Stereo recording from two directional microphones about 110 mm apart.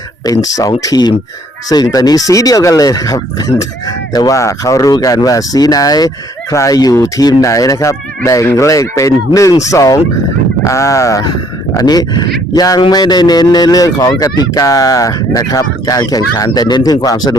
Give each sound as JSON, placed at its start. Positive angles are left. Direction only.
{"t": 0.3, "sound": "a man's voice", "side_deg": 30}